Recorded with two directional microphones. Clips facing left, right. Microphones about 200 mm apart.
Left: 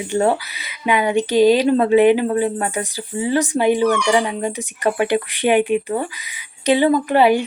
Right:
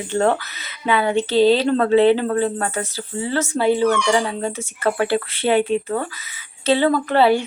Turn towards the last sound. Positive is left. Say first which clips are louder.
# left 2 dB
turn(degrees=15)  # may be behind; listen again after turning